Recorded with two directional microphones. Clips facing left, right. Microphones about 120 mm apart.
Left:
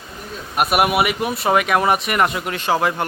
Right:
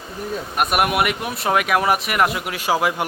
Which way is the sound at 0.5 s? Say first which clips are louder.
Left 3 dB; 5° left (ahead or behind).